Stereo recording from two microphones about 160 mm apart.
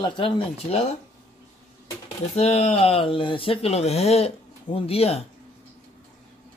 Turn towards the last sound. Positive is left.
turn(degrees=40)  # may be behind; listen again after turning